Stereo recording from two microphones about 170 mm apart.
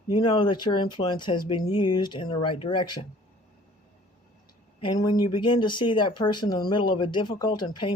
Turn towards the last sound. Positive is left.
turn(degrees=25)  # may be behind; listen again after turning